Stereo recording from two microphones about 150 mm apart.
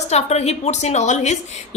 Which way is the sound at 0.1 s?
45° left (ahead or behind).